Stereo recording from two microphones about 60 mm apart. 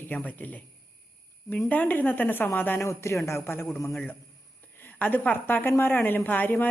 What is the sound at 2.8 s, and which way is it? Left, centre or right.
Speech, left.